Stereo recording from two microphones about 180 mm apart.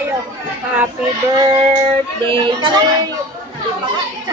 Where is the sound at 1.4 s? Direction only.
20° right (ahead or behind).